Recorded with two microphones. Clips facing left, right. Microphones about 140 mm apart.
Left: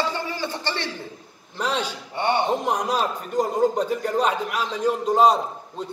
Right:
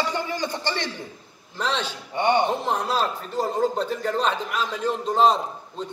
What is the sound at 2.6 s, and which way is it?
A man's voice, 15° left (ahead or behind).